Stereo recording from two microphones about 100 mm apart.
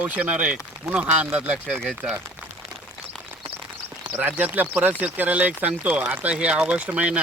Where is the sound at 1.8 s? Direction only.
5° left (ahead or behind).